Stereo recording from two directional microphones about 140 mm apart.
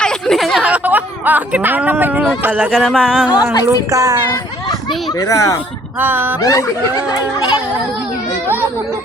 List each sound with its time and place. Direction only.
0.0 s a sound: 5° left (ahead or behind); by 2.2 s 15° right (ahead or behind)
2.4 s speech: 10° right (ahead or behind)
2.8 s a sound: 5° right (ahead or behind)
3.5 s speech: 30° left (ahead or behind)
3.8 s speech: 25° right (ahead or behind)
5.2 s speech: 20° left (ahead or behind)
6.0 s speech: 15° right (ahead or behind)
6.4 s speech: 25° left (ahead or behind)